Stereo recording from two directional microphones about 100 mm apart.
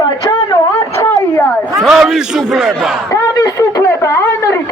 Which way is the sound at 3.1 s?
35° left (ahead or behind).